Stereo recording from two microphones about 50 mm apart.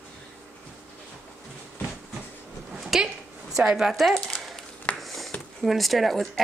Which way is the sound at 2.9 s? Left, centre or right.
Centre.